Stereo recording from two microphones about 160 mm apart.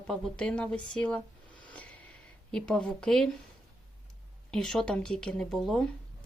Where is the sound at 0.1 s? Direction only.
5° left (ahead or behind).